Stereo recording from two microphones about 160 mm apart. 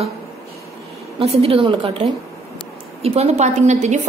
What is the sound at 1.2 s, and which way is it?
A woman's voice, 40° right (ahead or behind).